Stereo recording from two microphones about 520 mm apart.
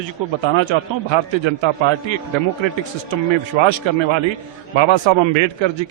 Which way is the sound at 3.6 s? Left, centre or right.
Right.